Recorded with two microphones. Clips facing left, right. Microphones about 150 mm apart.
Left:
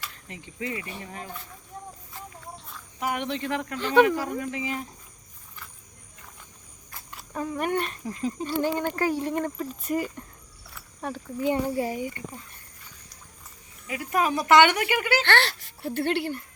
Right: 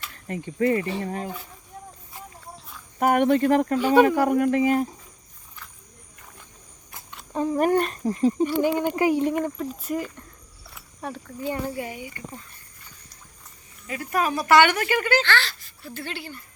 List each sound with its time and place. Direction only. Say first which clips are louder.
0.3 s speech: right 12 dB; 50° right (ahead or behind)
1.0 s speech: right 9 dB; 40° right (ahead or behind)
3.0 s speech: right 10 dB; 50° right (ahead or behind)
3.8 s speech: even; 10° right (ahead or behind)
4.1 s speech: right 9 dB; 60° right (ahead or behind)
7.3 s speech: right 6 dB; 30° right (ahead or behind)
8.4 s speech: right 4 dB; 15° right (ahead or behind)
9.6 s speech: even; centre (ahead or behind)
11.4 s speech: left 4 dB; 25° left (ahead or behind)
13.8 s speech: even; 10° left (ahead or behind)
15.2 s speech: left 1 dB; 65° left (ahead or behind)